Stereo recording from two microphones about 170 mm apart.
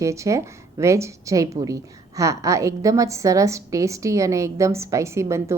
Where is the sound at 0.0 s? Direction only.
20° right (ahead or behind).